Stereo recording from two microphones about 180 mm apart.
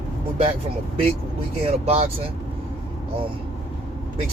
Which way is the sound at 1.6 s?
35° right (ahead or behind).